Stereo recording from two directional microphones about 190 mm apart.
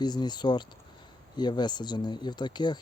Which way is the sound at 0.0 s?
20° left (ahead or behind).